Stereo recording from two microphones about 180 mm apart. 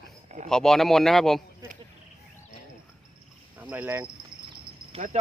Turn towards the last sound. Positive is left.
turn(degrees=-40)  # may be behind; listen again after turning